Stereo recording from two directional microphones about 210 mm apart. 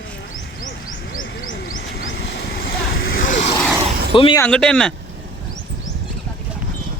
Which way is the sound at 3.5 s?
5° left (ahead or behind).